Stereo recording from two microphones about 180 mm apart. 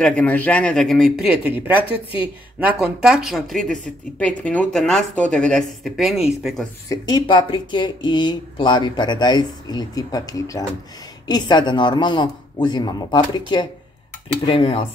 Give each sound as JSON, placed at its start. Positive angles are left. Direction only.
{"t": 0.0, "sound": "speech", "side_deg": 5}
{"t": 6.9, "sound": "speech", "side_deg": 25}
{"t": 14.4, "sound": "speech", "side_deg": 30}